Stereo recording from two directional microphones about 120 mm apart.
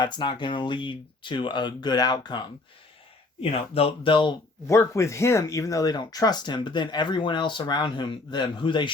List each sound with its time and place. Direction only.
0.0 s speech: 40° left (ahead or behind)
3.4 s speech: 55° left (ahead or behind)
4.6 s speech: 25° left (ahead or behind); by 8.9 s 40° left (ahead or behind)